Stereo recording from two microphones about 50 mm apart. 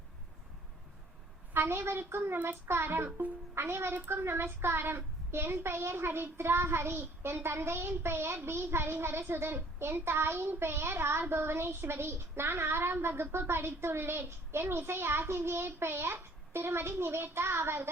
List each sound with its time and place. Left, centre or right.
1.5 s a woman's voice: right
3.1 s speech: right
3.5 s a woman's voice: right